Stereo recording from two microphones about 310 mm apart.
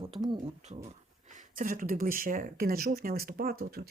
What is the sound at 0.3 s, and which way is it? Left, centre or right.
Speech, centre.